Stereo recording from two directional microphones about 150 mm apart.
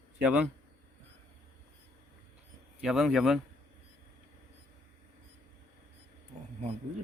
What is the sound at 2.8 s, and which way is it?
Speech, centre (ahead or behind).